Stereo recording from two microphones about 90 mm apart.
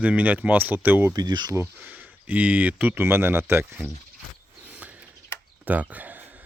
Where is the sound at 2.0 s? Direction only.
15° right (ahead or behind).